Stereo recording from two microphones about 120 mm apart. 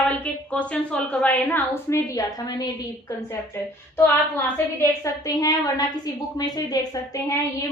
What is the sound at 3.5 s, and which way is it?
A woman's voice, 20° left (ahead or behind).